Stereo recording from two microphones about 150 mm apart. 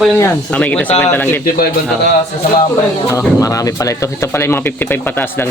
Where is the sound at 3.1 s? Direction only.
20° left (ahead or behind).